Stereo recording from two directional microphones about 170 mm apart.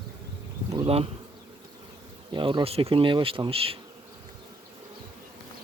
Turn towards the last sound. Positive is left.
turn(degrees=-35)  # may be behind; listen again after turning